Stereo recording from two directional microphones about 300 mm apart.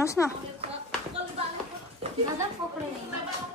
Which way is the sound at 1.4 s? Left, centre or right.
Centre.